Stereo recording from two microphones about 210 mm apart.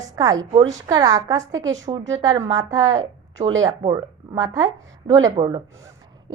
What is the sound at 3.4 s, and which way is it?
Speech, 35° right (ahead or behind).